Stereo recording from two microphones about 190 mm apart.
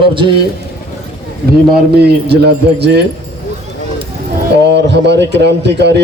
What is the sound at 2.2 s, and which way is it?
Speech, 60° right (ahead or behind).